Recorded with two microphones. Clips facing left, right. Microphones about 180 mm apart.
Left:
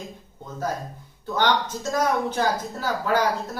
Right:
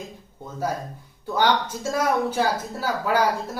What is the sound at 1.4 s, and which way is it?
Speech, 10° right (ahead or behind).